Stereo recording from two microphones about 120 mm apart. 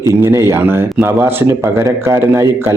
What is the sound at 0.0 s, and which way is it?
A man's voice, 20° right (ahead or behind).